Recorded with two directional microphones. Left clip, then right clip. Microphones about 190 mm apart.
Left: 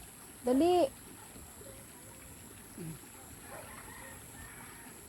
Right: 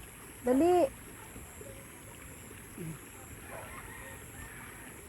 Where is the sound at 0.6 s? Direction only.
15° right (ahead or behind).